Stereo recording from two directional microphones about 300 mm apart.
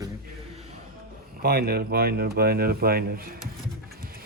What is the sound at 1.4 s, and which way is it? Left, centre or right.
Speech, right.